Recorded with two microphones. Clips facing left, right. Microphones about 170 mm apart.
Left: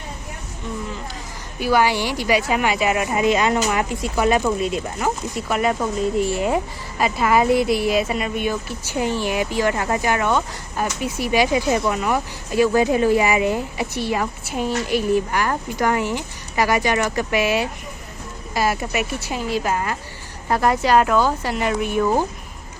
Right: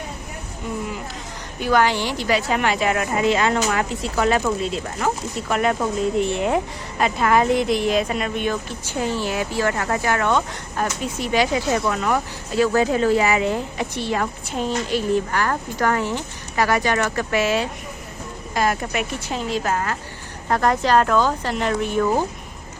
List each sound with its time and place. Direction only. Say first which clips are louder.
1.5 s speech: left 1 dB; 10° left (ahead or behind)